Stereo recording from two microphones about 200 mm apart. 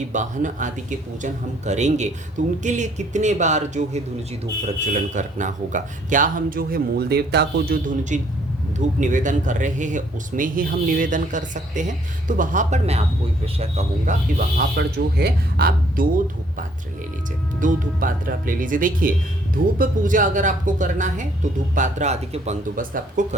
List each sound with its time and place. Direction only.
0.1 s speech: 40° right (ahead or behind)